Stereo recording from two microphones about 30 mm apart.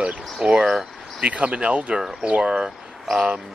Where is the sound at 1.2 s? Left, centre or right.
Right.